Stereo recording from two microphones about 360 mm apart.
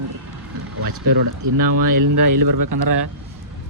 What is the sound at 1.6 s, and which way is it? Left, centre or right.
Speech, right.